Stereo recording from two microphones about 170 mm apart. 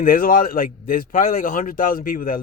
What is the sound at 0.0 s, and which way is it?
Speech, 55° left (ahead or behind).